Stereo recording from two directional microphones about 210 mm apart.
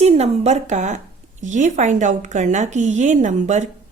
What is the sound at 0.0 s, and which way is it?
A woman's voice, 30° right (ahead or behind).